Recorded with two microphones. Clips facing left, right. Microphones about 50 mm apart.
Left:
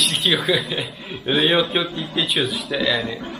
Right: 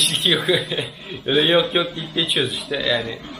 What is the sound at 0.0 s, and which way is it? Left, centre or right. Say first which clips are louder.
A man's voice: even; centre.